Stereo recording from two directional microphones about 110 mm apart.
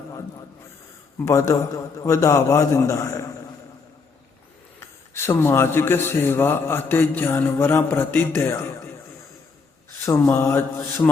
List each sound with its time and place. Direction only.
1.2 s speech: 25° left (ahead or behind)
4.8 s speech: 20° left (ahead or behind)
10.1 s speech: 25° left (ahead or behind)